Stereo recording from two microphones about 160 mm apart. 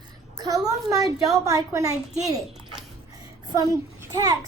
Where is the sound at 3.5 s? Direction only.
25° right (ahead or behind).